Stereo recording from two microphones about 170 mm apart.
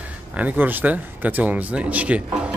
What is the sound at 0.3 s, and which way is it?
Speech, 10° right (ahead or behind).